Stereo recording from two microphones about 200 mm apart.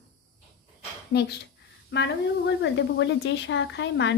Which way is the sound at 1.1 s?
55° left (ahead or behind).